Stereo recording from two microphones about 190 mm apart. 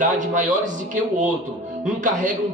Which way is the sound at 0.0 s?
40° right (ahead or behind).